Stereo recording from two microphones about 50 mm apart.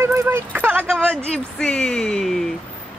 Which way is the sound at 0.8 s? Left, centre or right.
Centre.